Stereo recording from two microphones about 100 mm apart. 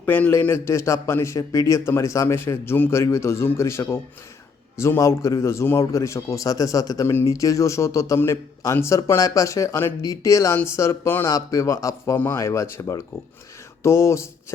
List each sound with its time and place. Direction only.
0.0 s a man's voice: 20° left (ahead or behind)
12.1 s a man's voice: 20° left (ahead or behind)